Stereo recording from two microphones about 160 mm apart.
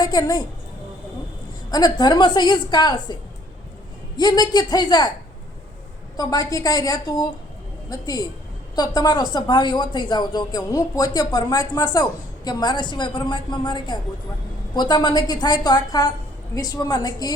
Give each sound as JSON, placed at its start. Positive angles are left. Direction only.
{"t": 0.0, "sound": "speech", "side_deg": 25}
{"t": 1.7, "sound": "speech", "side_deg": 25}
{"t": 4.2, "sound": "speech", "side_deg": 25}
{"t": 6.1, "sound": "speech", "side_deg": 20}